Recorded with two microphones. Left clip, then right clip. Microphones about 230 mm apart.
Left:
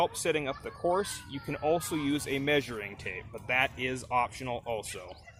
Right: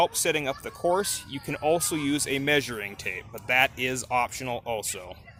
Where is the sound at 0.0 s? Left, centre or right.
Right.